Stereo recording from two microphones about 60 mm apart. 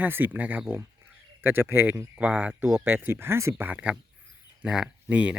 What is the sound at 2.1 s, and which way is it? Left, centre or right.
Speech, right.